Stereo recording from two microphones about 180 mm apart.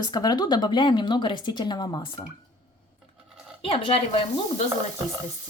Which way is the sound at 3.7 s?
30° left (ahead or behind).